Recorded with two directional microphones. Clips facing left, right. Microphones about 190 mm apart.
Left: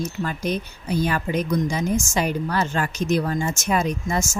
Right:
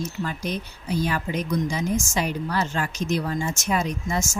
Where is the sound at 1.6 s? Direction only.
55° left (ahead or behind).